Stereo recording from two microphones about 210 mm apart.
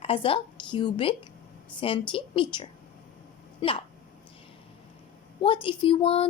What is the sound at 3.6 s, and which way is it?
Hiccup, 25° left (ahead or behind).